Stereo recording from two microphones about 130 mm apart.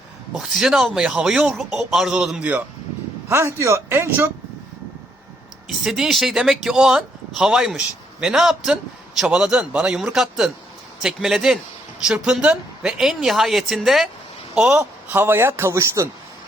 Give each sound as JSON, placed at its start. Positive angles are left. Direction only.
{"t": 0.3, "sound": "a man's voice", "side_deg": -5}
{"t": 5.6, "sound": "a man's voice", "side_deg": 0}